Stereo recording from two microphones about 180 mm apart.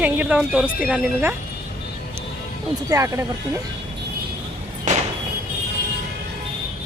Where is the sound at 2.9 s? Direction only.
15° right (ahead or behind).